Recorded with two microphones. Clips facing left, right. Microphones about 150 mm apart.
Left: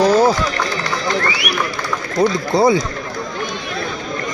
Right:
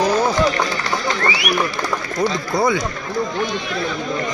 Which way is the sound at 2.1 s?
30° left (ahead or behind).